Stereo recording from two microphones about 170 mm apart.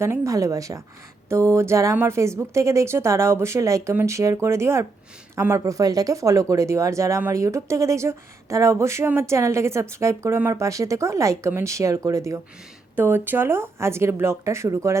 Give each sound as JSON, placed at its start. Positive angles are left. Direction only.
{"t": 0.0, "sound": "speech", "side_deg": -20}